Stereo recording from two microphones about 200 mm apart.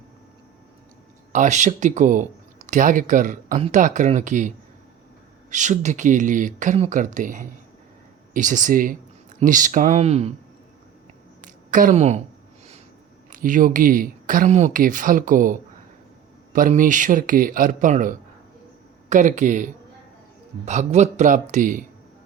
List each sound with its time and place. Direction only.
1.3 s speech: 35° right (ahead or behind)
11.4 s a sound: 40° right (ahead or behind)
13.3 s speech: 40° right (ahead or behind)